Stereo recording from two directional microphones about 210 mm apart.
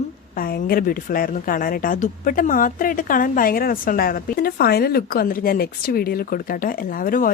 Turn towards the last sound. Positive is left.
turn(degrees=40)  # may be behind; listen again after turning